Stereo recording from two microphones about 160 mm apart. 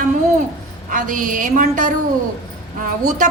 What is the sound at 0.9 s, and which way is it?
A woman's voice, 55° right (ahead or behind).